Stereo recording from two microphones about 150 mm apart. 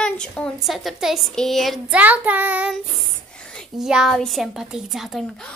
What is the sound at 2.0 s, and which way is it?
Child singing, 10° right (ahead or behind).